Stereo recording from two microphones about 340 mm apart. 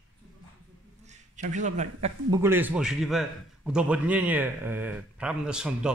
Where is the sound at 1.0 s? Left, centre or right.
Right.